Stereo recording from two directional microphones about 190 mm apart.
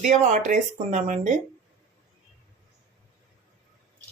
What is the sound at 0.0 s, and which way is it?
Speech, 40° right (ahead or behind).